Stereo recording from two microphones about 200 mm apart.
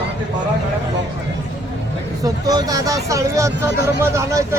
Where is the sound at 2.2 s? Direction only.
20° right (ahead or behind).